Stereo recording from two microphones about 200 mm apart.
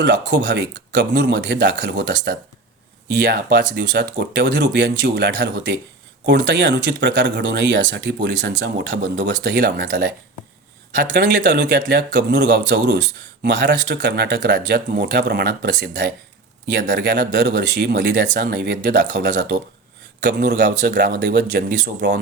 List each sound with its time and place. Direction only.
0.0 s speech: 65° right (ahead or behind)
20.9 s speech: 45° right (ahead or behind)